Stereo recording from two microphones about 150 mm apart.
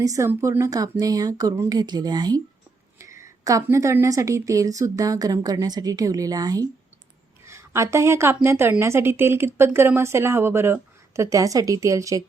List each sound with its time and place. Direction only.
0.0 s a woman's voice: 20° right (ahead or behind)